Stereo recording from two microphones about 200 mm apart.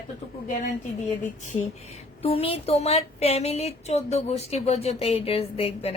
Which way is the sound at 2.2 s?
30° left (ahead or behind).